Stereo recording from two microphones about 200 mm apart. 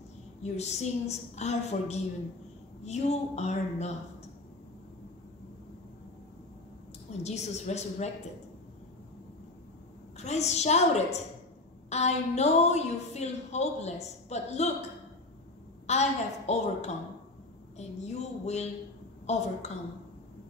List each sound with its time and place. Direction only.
0.4 s a woman's voice: 35° left (ahead or behind)
7.1 s a woman's voice: 35° left (ahead or behind)
10.1 s a woman's voice: 35° left (ahead or behind)
15.9 s a woman's voice: 35° left (ahead or behind)